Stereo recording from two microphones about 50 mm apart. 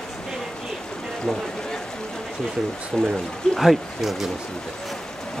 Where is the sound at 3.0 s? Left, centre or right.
Centre.